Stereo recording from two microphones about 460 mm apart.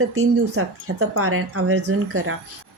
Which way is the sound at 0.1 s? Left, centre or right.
Right.